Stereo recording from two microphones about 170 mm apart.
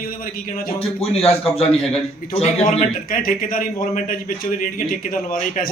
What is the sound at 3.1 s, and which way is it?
A man's voice, 55° left (ahead or behind).